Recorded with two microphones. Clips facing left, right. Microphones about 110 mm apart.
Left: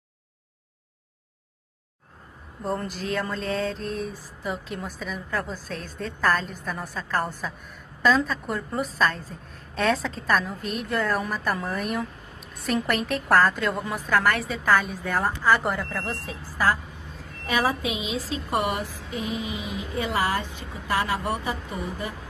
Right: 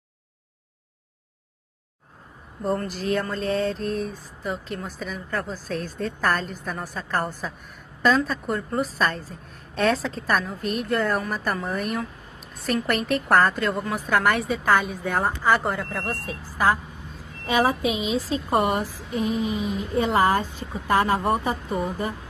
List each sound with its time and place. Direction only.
2.6 s a woman's voice: centre (ahead or behind)
17.5 s a woman's voice: 25° right (ahead or behind)
17.8 s speech: 40° right (ahead or behind)